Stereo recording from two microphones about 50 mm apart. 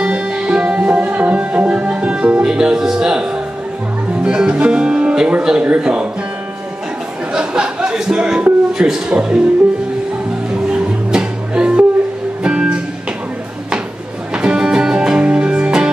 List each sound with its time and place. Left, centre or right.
0.0 s music: centre
4.2 s speech: centre
7.3 s music: centre
8.7 s speech: centre
10.5 s music: centre
14.3 s music: centre